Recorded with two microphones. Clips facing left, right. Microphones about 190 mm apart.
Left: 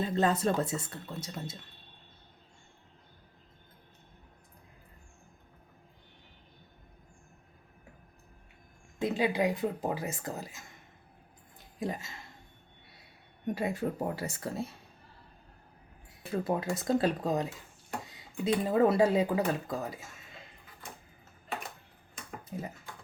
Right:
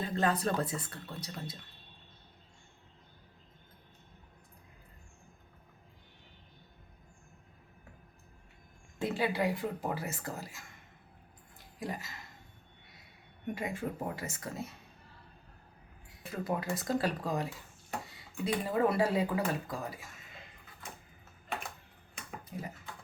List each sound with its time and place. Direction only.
0.0 s speech: 25° left (ahead or behind)
9.0 s speech: 15° left (ahead or behind)
11.8 s speech: 25° left (ahead or behind)
13.5 s speech: 35° left (ahead or behind)
16.3 s speech: 25° left (ahead or behind)
22.5 s speech: 30° left (ahead or behind)